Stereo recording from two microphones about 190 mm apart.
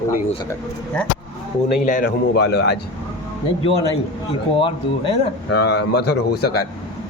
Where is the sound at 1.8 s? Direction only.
40° left (ahead or behind).